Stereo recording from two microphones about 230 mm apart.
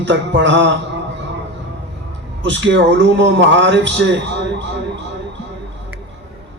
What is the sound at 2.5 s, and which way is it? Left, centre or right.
A man's voice, right.